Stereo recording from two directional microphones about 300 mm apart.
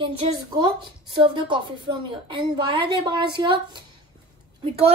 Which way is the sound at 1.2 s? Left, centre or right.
Centre.